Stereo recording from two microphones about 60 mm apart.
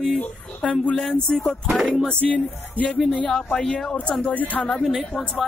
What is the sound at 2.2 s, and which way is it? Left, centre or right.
Music, left.